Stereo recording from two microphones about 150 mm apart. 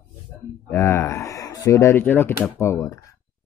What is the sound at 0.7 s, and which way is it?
Speech, 15° left (ahead or behind).